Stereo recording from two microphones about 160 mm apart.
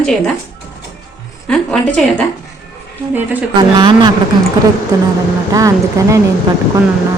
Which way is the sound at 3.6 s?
30° right (ahead or behind).